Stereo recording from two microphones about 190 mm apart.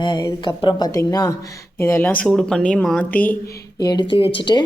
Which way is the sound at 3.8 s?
20° left (ahead or behind).